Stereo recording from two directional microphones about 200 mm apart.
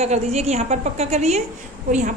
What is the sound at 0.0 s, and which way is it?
A woman's voice, 30° right (ahead or behind).